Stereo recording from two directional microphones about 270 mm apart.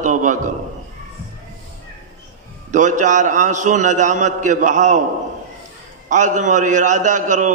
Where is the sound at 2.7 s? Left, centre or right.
Right.